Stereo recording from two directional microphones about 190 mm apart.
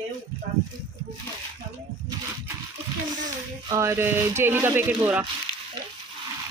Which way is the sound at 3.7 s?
15° right (ahead or behind).